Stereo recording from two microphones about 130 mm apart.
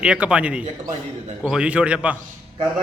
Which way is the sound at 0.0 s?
10° right (ahead or behind).